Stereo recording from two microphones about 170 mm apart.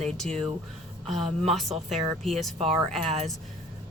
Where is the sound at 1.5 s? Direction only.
Centre (ahead or behind).